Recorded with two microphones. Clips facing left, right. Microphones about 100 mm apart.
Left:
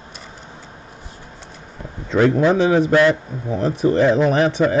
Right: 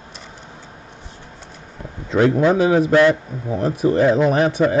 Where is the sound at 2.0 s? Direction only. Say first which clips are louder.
Even; 10° right (ahead or behind).